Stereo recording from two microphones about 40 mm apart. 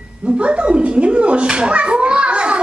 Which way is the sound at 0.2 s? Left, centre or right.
Right.